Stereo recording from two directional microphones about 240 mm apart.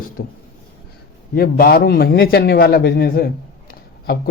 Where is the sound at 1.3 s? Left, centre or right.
Left.